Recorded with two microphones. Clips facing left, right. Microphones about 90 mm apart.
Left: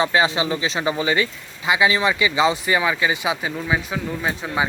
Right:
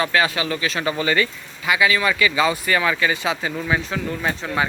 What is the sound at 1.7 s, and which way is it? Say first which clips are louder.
Speech: left 1 dB; 25° left (ahead or behind).